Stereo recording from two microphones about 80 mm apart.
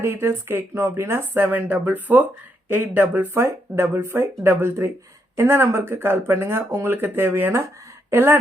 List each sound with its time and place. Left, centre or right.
0.0 s speech: right